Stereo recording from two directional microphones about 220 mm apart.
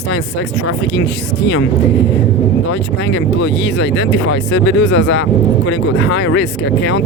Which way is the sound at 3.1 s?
55° left (ahead or behind).